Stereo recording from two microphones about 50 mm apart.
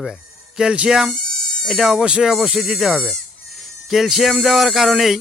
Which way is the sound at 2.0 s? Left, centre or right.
Centre.